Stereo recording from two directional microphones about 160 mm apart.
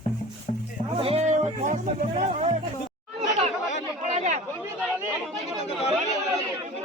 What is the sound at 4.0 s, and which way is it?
Chatter, 50° right (ahead or behind).